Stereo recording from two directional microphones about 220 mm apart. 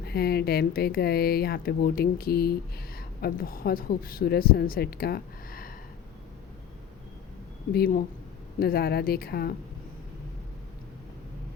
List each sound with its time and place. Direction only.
0.0 s speech: 45° left (ahead or behind)
7.7 s speech: 45° left (ahead or behind)